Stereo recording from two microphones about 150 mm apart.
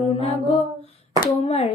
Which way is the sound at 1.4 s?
40° left (ahead or behind).